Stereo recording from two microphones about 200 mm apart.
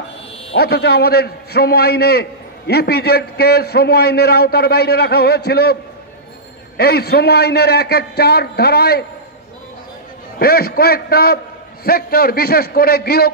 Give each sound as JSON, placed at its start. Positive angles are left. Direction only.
{"t": 0.6, "sound": "a man's voice", "side_deg": 50}
{"t": 6.8, "sound": "a man's voice", "side_deg": 50}
{"t": 10.4, "sound": "a man's voice", "side_deg": 50}